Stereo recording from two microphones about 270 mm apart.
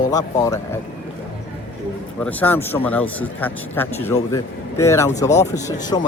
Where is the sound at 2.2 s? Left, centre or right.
Centre.